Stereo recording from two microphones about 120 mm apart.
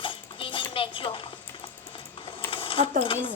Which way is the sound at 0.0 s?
45° left (ahead or behind).